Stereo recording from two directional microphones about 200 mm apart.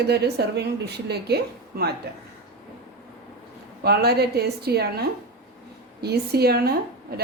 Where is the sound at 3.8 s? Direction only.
50° right (ahead or behind).